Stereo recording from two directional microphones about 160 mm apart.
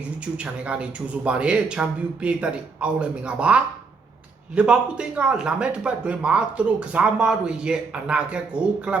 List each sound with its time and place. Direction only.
0.3 s speech: 5° right (ahead or behind)